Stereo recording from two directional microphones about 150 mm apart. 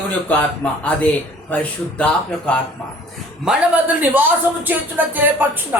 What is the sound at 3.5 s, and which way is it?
Speech, 5° right (ahead or behind).